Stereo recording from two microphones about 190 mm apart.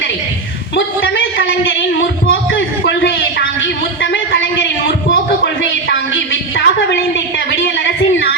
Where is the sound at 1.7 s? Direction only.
65° left (ahead or behind).